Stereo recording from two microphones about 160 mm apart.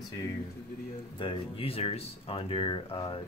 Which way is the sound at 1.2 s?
35° left (ahead or behind).